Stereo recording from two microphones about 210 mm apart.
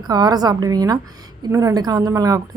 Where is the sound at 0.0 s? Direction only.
20° right (ahead or behind).